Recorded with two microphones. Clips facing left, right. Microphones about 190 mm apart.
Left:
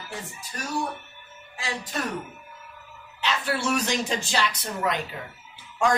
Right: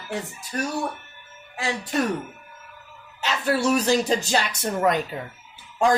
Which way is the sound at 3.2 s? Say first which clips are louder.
Right 4 dB; 40° right (ahead or behind).